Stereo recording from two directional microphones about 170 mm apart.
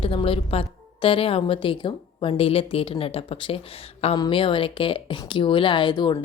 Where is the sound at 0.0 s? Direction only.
30° left (ahead or behind).